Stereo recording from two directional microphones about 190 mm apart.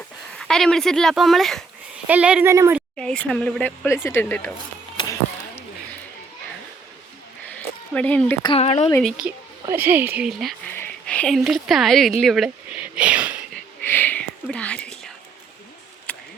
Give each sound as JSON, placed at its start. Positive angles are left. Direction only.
{"t": 0.3, "sound": "speech", "side_deg": 0}
{"t": 3.0, "sound": "speech", "side_deg": 5}
{"t": 5.0, "sound": "a sound", "side_deg": 25}
{"t": 7.9, "sound": "speech", "side_deg": 5}
{"t": 8.4, "sound": "speech", "side_deg": 30}
{"t": 8.9, "sound": "speech", "side_deg": 0}
{"t": 12.2, "sound": "a sound", "side_deg": 0}
{"t": 13.8, "sound": "a sound", "side_deg": 10}
{"t": 14.4, "sound": "whispering", "side_deg": 5}